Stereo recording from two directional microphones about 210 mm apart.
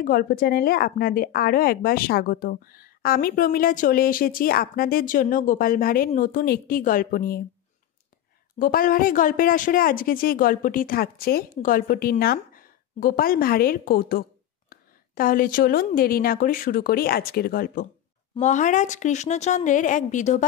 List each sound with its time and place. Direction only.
0.0 s a woman's voice: 45° left (ahead or behind)
8.5 s a woman's voice: 40° left (ahead or behind)